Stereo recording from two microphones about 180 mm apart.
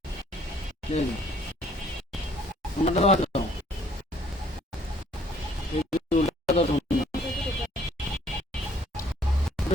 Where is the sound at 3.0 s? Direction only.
35° left (ahead or behind).